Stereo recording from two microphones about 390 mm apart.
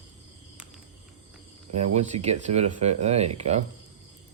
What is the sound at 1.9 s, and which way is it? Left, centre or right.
Speech, centre.